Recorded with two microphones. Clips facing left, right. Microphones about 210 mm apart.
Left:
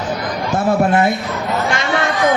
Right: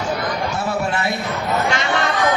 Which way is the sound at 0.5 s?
50° left (ahead or behind).